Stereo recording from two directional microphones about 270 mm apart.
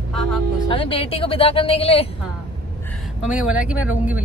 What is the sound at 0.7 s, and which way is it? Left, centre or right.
A woman's voice, centre.